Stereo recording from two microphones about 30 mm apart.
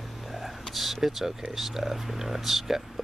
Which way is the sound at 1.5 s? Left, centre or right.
Centre.